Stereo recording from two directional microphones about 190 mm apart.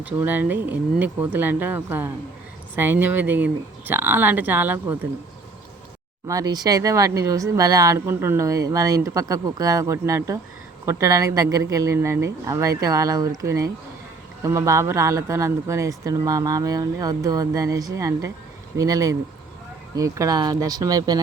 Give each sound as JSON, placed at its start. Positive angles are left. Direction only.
{"t": 0.0, "sound": "speech", "side_deg": -10}
{"t": 6.2, "sound": "speech", "side_deg": -20}